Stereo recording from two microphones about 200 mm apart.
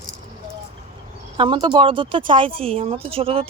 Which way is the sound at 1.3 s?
25° right (ahead or behind).